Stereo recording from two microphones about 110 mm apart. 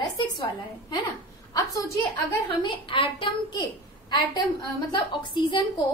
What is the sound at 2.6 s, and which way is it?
A woman's voice, 45° left (ahead or behind).